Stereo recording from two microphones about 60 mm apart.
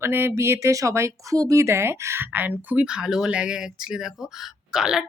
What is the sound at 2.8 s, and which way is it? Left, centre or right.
Speech, centre.